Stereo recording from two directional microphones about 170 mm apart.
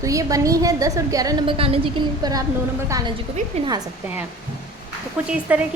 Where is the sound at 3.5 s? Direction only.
40° right (ahead or behind).